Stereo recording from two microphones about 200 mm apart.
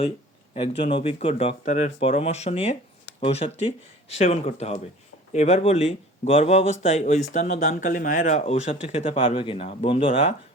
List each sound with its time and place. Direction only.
0.9 s speech: 25° left (ahead or behind)